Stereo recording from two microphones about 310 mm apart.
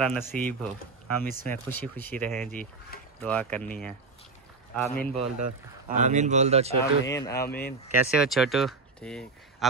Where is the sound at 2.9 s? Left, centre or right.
Left.